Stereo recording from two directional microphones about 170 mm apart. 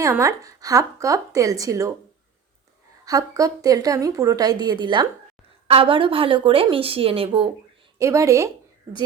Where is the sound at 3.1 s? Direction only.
20° right (ahead or behind).